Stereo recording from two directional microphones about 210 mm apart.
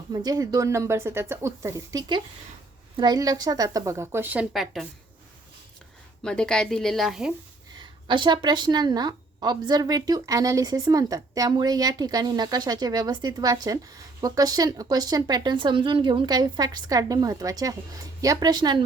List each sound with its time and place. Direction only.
0.1 s speech: 20° right (ahead or behind); by 4.9 s centre (ahead or behind)
6.2 s a woman's voice: 5° left (ahead or behind)
7.8 s a woman's voice: 20° right (ahead or behind)